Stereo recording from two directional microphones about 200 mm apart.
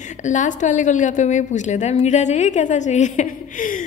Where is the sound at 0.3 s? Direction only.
40° left (ahead or behind).